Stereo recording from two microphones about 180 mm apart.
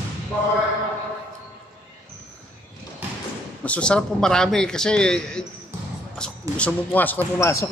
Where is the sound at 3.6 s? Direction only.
5° left (ahead or behind).